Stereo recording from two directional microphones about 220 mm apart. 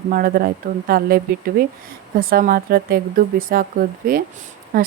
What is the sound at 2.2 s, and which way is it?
Speech, 40° right (ahead or behind).